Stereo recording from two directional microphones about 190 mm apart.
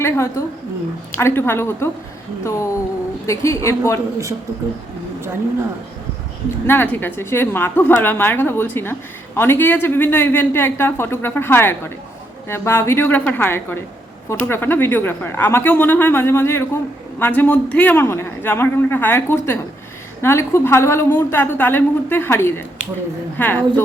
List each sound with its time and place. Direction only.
0.0 s a woman's voice: 15° left (ahead or behind)
6.7 s a woman's voice: 10° left (ahead or behind)